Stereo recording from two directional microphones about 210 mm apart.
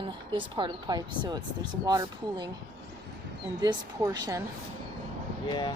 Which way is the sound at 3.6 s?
20° right (ahead or behind).